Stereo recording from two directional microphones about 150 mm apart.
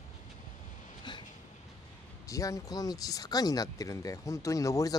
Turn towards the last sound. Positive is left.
turn(degrees=20)  # may be behind; listen again after turning